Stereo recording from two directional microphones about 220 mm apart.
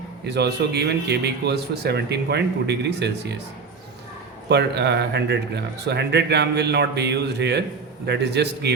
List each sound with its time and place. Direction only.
0.3 s a man's voice: 50° right (ahead or behind)
4.4 s a man's voice: 50° right (ahead or behind)